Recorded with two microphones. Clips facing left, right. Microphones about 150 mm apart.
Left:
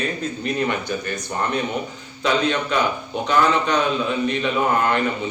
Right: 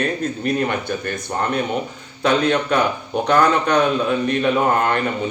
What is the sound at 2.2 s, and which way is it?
Speech, 50° right (ahead or behind).